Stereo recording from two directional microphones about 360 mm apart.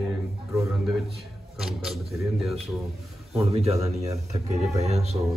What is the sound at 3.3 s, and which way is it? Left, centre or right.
Speech, centre.